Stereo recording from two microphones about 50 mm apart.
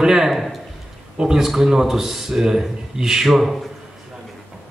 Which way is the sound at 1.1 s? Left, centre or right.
Centre.